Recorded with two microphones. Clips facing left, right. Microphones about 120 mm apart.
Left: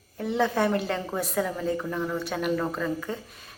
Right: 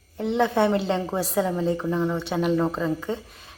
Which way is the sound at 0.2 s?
20° right (ahead or behind).